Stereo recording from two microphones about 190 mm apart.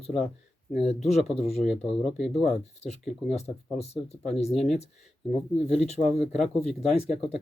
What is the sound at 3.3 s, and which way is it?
Speech, 35° left (ahead or behind).